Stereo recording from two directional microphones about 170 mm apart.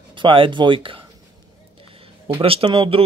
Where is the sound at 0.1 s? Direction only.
30° right (ahead or behind).